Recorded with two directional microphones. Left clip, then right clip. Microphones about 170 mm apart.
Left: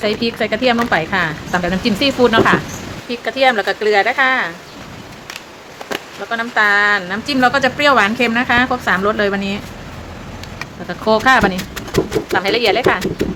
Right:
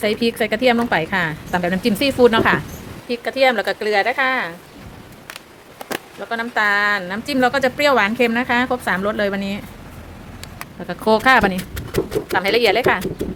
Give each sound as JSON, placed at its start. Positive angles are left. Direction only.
{"t": 0.0, "sound": "a woman's voice", "side_deg": -45}
{"t": 6.2, "sound": "speech", "side_deg": -40}
{"t": 10.8, "sound": "speech", "side_deg": -40}